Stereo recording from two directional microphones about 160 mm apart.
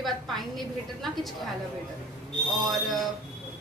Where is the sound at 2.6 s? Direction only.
Centre (ahead or behind).